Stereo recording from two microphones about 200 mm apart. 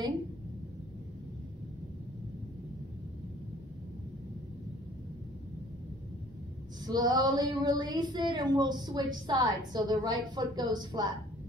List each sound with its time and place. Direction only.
6.9 s a woman's voice: 20° right (ahead or behind)